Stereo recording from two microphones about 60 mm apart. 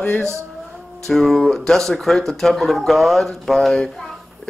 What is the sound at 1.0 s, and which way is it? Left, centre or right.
Speech, centre.